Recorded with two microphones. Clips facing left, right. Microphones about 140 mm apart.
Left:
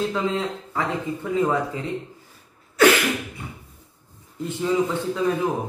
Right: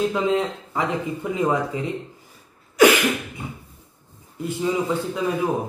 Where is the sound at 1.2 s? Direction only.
15° right (ahead or behind).